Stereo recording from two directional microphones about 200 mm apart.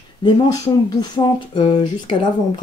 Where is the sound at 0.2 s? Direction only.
20° left (ahead or behind).